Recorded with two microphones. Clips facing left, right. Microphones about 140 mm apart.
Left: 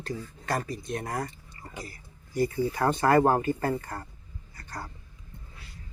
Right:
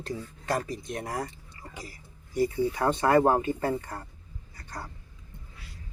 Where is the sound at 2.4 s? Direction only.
20° right (ahead or behind).